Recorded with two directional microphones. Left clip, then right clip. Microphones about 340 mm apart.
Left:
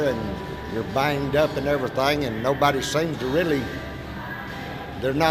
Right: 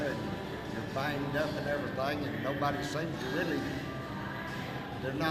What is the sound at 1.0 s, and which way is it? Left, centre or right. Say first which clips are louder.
Speech: left 12 dB; left.